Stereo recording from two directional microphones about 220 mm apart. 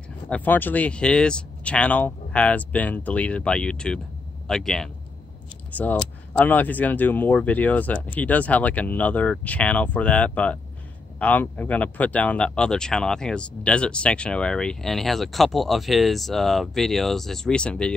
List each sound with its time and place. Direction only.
0.3 s speech: 10° left (ahead or behind)